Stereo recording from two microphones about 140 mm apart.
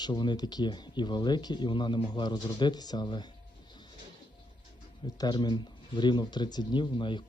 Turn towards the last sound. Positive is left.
turn(degrees=35)  # may be behind; listen again after turning